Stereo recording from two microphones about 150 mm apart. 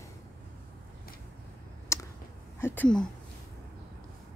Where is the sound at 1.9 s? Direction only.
20° left (ahead or behind).